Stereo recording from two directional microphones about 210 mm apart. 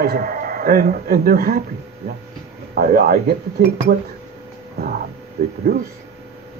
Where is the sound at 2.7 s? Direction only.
45° right (ahead or behind).